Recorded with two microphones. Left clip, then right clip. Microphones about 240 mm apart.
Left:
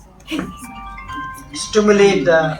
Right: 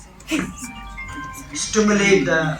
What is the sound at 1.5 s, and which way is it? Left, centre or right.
Speech, left.